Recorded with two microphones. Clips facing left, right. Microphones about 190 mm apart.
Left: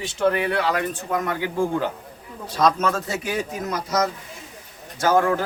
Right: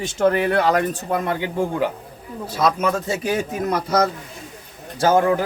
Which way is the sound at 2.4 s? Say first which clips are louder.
Even; 5° right (ahead or behind).